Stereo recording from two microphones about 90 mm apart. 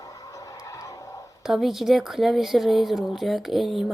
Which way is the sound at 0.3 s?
40° left (ahead or behind).